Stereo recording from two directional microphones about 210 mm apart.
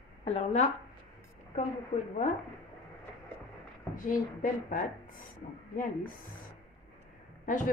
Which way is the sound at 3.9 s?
40° left (ahead or behind).